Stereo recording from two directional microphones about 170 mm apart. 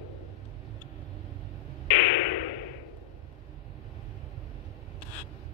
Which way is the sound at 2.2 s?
70° left (ahead or behind).